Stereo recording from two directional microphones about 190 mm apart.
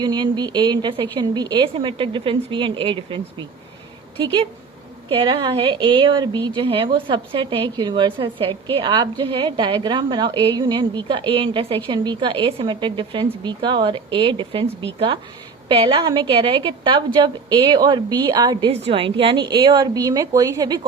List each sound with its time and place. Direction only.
0.0 s speech: 20° right (ahead or behind)
5.0 s speech: 25° right (ahead or behind)
18.7 s speech: 30° right (ahead or behind)